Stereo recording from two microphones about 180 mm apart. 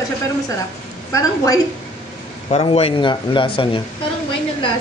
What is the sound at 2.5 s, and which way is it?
Speech, 35° left (ahead or behind).